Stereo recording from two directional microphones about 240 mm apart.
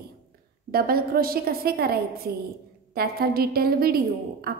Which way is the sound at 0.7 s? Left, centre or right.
Right.